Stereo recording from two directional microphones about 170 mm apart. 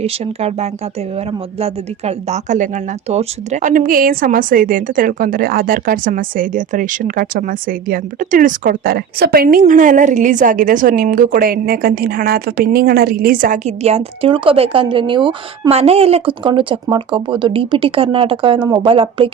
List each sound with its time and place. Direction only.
0.0 s a woman's voice: 40° right (ahead or behind)